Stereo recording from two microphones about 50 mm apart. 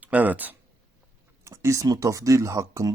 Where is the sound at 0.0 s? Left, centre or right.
Right.